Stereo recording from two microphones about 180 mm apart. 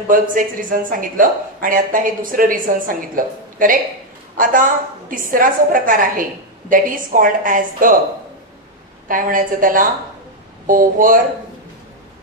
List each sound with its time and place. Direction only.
0.1 s speech: 50° right (ahead or behind)
9.0 s speech: 50° right (ahead or behind)